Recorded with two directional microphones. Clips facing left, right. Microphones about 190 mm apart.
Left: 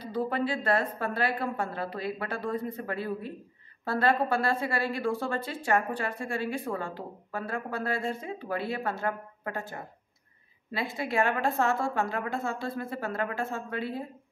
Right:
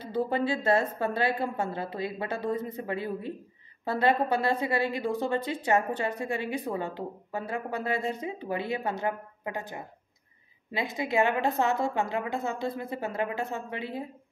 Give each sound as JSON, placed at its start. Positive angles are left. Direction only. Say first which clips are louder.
{"t": 0.0, "sound": "a woman's voice", "louder": "right 1 dB", "side_deg": -25}